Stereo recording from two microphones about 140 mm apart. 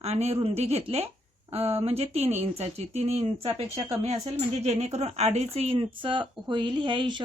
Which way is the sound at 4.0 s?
50° right (ahead or behind).